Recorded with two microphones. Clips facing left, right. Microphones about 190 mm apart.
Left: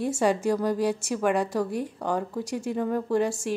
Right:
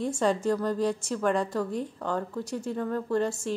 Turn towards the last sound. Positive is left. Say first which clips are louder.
# left 3 dB
turn(degrees=10)  # may be behind; listen again after turning